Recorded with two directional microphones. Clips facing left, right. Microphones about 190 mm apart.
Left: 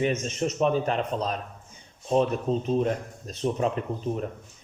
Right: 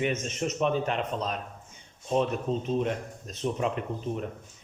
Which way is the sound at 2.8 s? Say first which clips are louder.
Left 3 dB; 40° left (ahead or behind).